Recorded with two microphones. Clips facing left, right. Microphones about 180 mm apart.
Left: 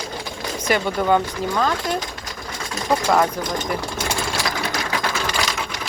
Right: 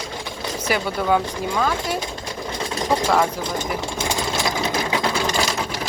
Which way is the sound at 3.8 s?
20° right (ahead or behind).